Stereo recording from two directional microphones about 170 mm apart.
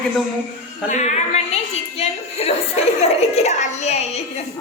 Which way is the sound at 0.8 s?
40° left (ahead or behind).